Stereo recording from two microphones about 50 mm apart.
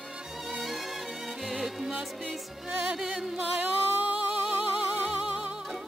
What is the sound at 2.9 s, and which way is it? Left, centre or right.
Music, centre.